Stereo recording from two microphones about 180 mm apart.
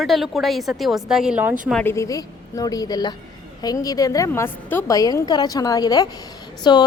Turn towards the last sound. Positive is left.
turn(degrees=25)  # may be behind; listen again after turning